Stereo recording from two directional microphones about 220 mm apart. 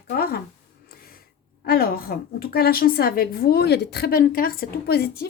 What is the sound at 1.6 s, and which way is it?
A woman's voice, 45° left (ahead or behind).